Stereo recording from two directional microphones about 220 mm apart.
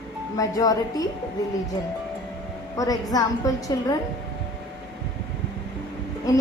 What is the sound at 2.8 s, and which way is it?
A woman's voice, 15° left (ahead or behind).